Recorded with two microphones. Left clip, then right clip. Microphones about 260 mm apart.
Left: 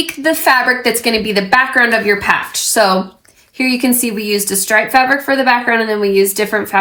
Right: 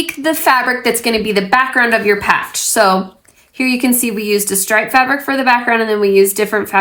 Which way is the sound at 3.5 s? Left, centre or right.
Right.